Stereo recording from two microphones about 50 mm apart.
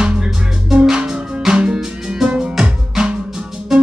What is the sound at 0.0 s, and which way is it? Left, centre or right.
Music, centre.